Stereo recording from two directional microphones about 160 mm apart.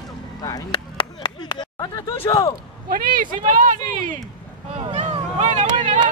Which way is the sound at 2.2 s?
20° left (ahead or behind).